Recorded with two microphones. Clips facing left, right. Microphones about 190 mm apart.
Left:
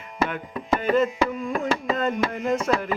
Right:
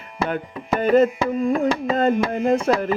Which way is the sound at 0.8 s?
35° right (ahead or behind).